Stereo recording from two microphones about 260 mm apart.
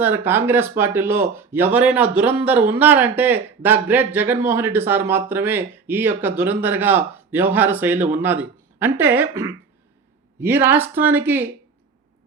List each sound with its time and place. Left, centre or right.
0.0 s speech: centre